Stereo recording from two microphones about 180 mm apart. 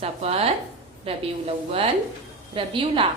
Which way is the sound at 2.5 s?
30° right (ahead or behind).